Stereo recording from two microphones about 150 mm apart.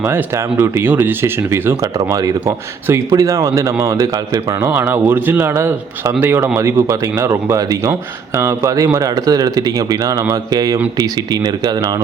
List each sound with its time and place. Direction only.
0.6 s speech: 15° right (ahead or behind)
2.8 s speech: 20° right (ahead or behind)